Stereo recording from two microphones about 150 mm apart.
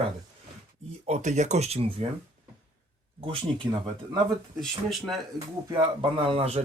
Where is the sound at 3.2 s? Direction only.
35° right (ahead or behind).